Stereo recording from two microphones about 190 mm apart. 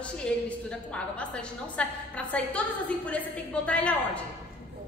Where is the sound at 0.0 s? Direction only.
5° left (ahead or behind).